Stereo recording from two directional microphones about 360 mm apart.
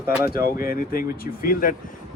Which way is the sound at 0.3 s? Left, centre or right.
Left.